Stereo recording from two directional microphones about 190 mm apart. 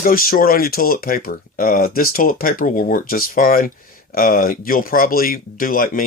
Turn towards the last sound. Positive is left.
turn(degrees=50)  # may be behind; listen again after turning